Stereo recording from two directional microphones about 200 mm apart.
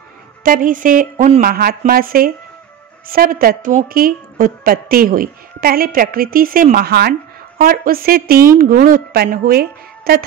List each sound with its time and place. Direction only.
0.4 s a woman's voice: 45° right (ahead or behind)